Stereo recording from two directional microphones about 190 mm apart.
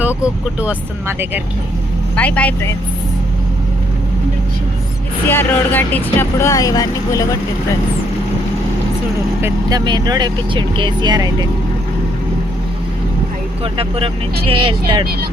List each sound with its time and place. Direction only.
0.6 s speech: 10° right (ahead or behind)
2.1 s speech: 5° left (ahead or behind)
5.3 s speech: 10° left (ahead or behind)
9.4 s speech: 20° right (ahead or behind)
13.7 s speech: 30° right (ahead or behind)